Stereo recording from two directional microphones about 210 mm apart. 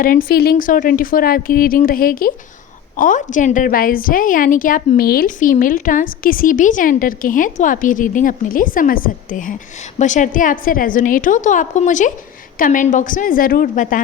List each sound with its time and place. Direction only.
0.0 s a woman's voice: 45° left (ahead or behind)